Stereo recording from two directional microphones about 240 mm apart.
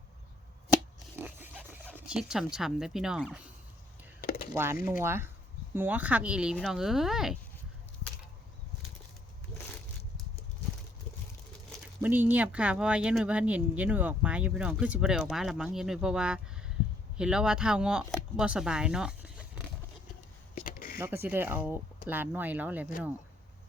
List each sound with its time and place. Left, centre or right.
1.1 s dog: centre
2.0 s speech: centre
4.2 s a sound: left
4.5 s speech: centre
12.0 s speech: centre
20.6 s a sound: left
21.0 s speech: centre